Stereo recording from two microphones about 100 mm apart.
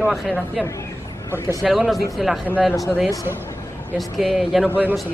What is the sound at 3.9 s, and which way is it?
Speech, centre (ahead or behind).